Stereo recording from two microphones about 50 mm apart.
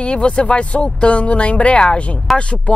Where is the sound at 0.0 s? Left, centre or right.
Left.